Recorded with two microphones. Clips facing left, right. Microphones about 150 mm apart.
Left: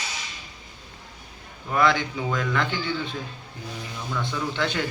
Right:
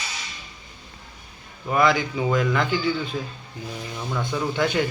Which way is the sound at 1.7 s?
5° right (ahead or behind).